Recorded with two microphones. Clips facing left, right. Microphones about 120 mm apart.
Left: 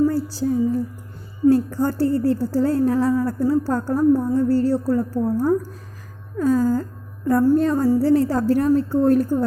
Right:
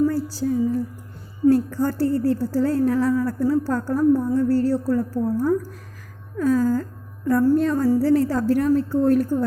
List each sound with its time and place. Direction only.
0.1 s a woman's voice: 30° left (ahead or behind)